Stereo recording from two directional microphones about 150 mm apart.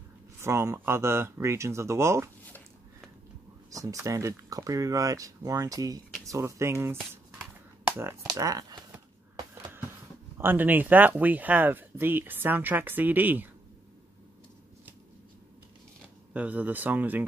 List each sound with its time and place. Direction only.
0.4 s speech: 20° right (ahead or behind)
3.7 s speech: 20° right (ahead or behind)
6.2 s a sound: 20° right (ahead or behind)
8.4 s speech: 20° right (ahead or behind)
10.3 s speech: 15° right (ahead or behind)
16.3 s speech: 10° right (ahead or behind)